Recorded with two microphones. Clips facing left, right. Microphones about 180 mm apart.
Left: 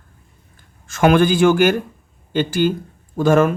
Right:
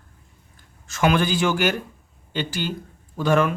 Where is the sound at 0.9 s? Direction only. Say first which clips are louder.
Left 6 dB; 50° left (ahead or behind).